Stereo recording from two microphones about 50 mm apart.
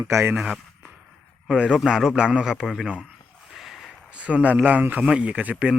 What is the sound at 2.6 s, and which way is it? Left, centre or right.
Speech, centre.